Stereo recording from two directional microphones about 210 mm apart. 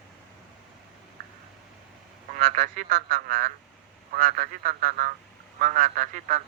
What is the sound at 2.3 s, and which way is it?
Speech, 40° right (ahead or behind).